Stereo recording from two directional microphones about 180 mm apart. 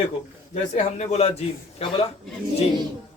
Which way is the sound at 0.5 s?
35° left (ahead or behind).